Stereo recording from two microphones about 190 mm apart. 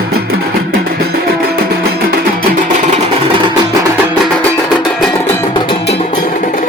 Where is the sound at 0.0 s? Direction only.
55° right (ahead or behind).